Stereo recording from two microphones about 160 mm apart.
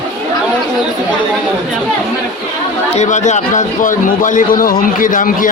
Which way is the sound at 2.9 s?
45° left (ahead or behind).